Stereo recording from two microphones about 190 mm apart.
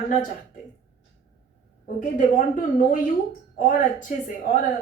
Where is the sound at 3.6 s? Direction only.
45° left (ahead or behind).